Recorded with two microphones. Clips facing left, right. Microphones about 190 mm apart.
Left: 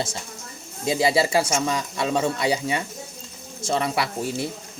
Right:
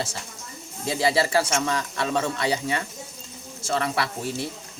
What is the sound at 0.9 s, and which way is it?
Speech, 15° left (ahead or behind).